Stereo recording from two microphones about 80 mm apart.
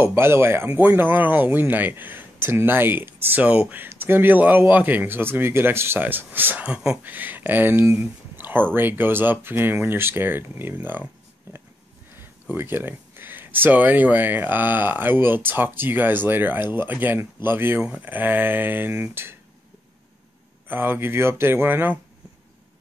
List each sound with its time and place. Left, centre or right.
0.0 s speech: right
8.4 s a sound: right
8.7 s speech: right
12.2 s speech: right
20.6 s speech: right